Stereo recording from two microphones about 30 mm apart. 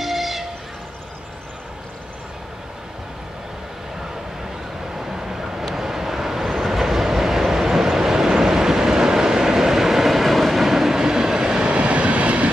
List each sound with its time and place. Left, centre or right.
0.0 s train: centre
4.9 s vehicle: centre
11.6 s vehicle: right